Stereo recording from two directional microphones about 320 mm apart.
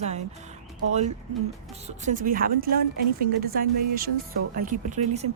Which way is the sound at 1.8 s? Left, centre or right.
Right.